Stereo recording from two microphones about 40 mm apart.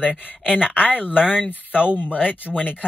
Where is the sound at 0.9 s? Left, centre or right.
Left.